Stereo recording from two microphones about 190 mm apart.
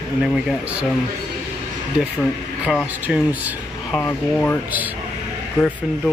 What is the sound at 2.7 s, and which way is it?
Speech, 5° right (ahead or behind).